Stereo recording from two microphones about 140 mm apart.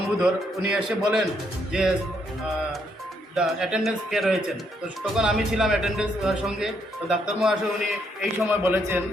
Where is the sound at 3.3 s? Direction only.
5° right (ahead or behind).